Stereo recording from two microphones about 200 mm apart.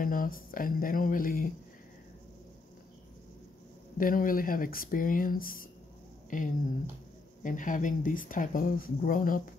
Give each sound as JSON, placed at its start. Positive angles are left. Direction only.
{"t": 0.0, "sound": "speech", "side_deg": 45}
{"t": 4.0, "sound": "speech", "side_deg": 45}
{"t": 6.3, "sound": "a sound", "side_deg": 40}
{"t": 7.4, "sound": "speech", "side_deg": 40}